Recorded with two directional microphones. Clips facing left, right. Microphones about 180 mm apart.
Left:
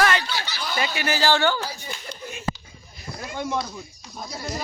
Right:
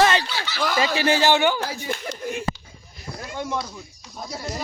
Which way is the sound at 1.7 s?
75° right (ahead or behind).